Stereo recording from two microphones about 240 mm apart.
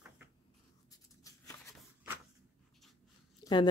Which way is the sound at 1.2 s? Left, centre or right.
Centre.